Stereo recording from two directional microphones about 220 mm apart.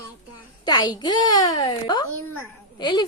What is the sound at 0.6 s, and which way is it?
A woman's voice, 20° left (ahead or behind).